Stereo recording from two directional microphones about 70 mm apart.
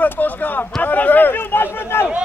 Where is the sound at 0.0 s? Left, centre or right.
Left.